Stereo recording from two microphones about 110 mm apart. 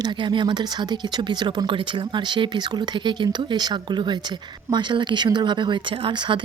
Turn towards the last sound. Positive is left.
turn(degrees=-45)  # may be behind; listen again after turning